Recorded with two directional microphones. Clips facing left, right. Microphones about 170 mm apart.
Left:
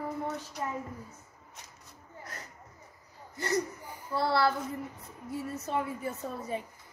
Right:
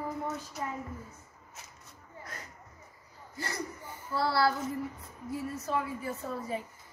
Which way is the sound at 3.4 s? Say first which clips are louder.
Left 7 dB; 15° left (ahead or behind).